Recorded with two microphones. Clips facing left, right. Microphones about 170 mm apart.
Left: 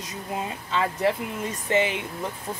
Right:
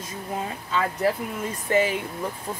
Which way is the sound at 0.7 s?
25° left (ahead or behind).